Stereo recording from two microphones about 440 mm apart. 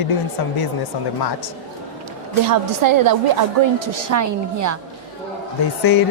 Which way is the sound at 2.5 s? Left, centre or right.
Right.